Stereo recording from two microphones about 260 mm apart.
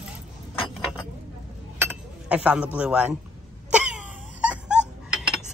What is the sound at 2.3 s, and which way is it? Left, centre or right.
Speech, centre.